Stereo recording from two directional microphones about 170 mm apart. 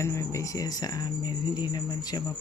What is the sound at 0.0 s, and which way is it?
Speech, 15° left (ahead or behind).